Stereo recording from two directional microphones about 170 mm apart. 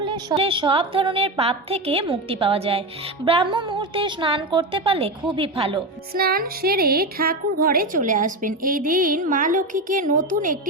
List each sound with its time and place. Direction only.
0.0 s a woman's voice: 30° right (ahead or behind)
6.1 s a woman's voice: 60° right (ahead or behind)